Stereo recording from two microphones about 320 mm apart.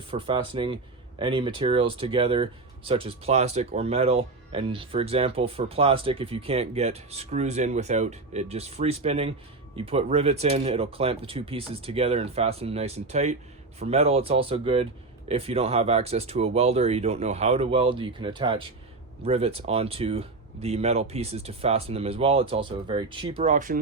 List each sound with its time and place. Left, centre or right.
0.1 s speech: centre